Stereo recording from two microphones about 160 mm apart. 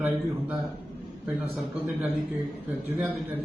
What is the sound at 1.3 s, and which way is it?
A man's voice, 10° right (ahead or behind).